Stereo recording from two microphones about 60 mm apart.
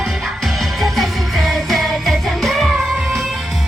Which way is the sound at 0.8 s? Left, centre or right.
Centre.